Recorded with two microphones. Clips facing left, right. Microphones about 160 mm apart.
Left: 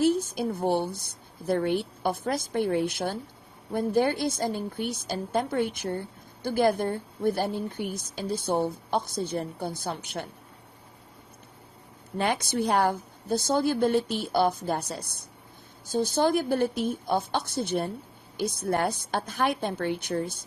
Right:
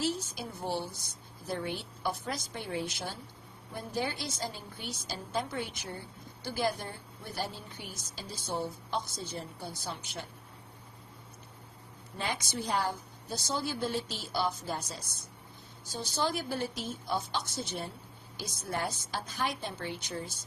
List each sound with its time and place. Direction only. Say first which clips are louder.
0.0 s a woman's voice: left 10 dB; 55° left (ahead or behind)
12.1 s a woman's voice: left 9 dB; 60° left (ahead or behind)